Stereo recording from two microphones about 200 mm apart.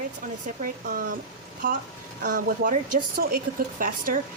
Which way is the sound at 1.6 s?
45° right (ahead or behind).